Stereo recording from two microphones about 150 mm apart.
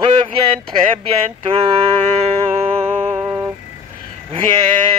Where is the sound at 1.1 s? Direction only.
40° right (ahead or behind).